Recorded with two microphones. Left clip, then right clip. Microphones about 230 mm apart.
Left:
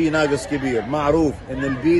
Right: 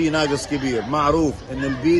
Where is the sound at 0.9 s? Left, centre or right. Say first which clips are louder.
Even; centre.